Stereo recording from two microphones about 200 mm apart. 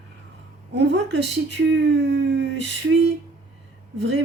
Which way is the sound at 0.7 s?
60° right (ahead or behind).